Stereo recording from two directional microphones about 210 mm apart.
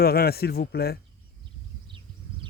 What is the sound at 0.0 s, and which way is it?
Speech, 45° left (ahead or behind).